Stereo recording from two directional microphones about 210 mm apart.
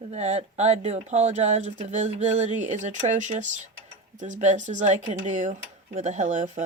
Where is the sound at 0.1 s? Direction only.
30° right (ahead or behind).